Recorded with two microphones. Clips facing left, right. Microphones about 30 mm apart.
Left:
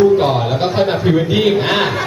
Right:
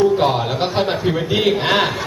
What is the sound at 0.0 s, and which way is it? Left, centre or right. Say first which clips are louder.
A man's voice: left 3 dB; centre.